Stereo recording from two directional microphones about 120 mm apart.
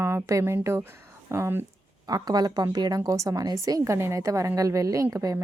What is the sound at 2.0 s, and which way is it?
A woman's voice, 35° right (ahead or behind).